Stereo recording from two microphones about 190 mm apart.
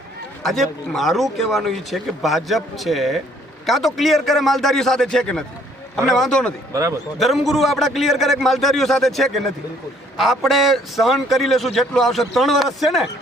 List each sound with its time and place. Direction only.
0.4 s a man's voice: centre (ahead or behind)
6.7 s speech: 15° right (ahead or behind)
7.2 s a man's voice: centre (ahead or behind)